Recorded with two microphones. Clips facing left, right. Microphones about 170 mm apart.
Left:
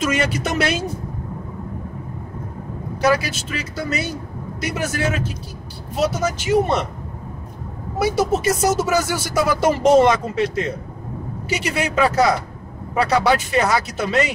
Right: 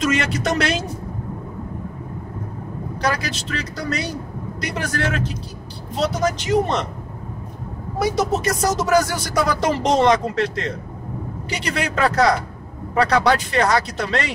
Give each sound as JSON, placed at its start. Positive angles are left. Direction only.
{"t": 0.0, "sound": "speech", "side_deg": 5}
{"t": 3.0, "sound": "speech", "side_deg": 5}
{"t": 8.0, "sound": "speech", "side_deg": 5}